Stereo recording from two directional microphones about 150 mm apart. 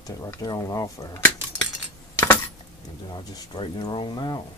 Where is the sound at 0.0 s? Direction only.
20° left (ahead or behind).